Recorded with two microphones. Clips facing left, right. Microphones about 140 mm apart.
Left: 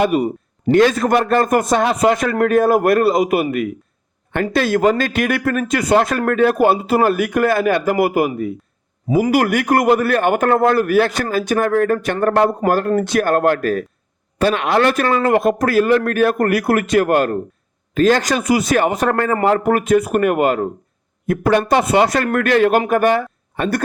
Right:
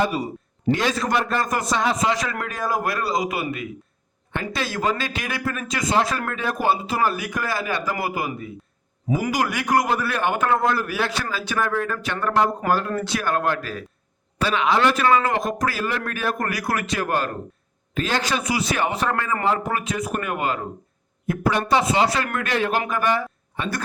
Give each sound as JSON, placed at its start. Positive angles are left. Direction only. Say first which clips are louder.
{"t": 0.0, "sound": "a man's voice", "louder": "left 7 dB", "side_deg": 60}
{"t": 9.3, "sound": "a man's voice", "louder": "left 5 dB", "side_deg": 55}
{"t": 17.9, "sound": "a man's voice", "louder": "left 9 dB", "side_deg": 45}